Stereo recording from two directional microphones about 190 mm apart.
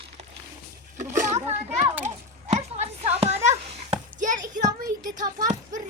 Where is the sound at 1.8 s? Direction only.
15° right (ahead or behind).